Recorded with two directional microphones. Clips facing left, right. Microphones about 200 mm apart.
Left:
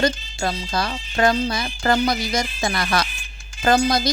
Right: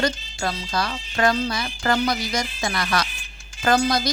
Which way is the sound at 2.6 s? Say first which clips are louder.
Left 2 dB; 25° left (ahead or behind).